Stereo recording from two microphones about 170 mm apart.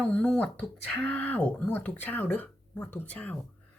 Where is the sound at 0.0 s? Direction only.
5° left (ahead or behind).